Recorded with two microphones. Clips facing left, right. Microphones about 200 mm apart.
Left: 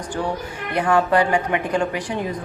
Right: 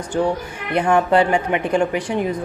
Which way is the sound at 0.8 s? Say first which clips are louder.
Right 2 dB; 20° right (ahead or behind).